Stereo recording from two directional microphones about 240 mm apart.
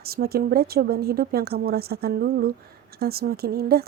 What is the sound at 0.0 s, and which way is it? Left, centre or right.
Speech, right.